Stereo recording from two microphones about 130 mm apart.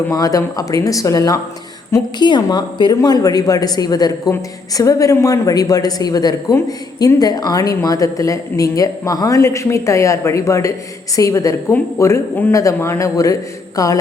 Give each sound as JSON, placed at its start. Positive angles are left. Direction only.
{"t": 0.1, "sound": "a woman's voice", "side_deg": 25}